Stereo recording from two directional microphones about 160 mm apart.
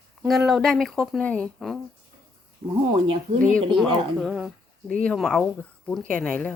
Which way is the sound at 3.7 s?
Centre (ahead or behind).